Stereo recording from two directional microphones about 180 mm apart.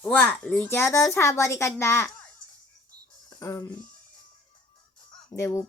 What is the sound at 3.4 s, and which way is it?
Speech, 20° left (ahead or behind).